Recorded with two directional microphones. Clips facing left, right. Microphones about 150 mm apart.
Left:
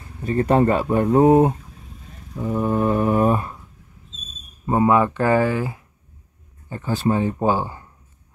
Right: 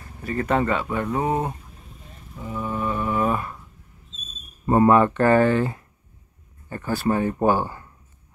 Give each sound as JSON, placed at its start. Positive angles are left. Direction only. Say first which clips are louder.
{"t": 0.2, "sound": "speech", "louder": "left 5 dB", "side_deg": 30}
{"t": 2.3, "sound": "mantra", "louder": "left 8 dB", "side_deg": 40}
{"t": 4.6, "sound": "speech", "louder": "right 1 dB", "side_deg": 10}